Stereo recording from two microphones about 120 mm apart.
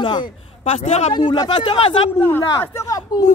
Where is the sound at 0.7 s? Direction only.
65° left (ahead or behind).